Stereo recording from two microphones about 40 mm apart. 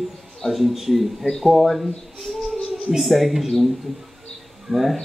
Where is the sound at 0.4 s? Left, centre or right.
Centre.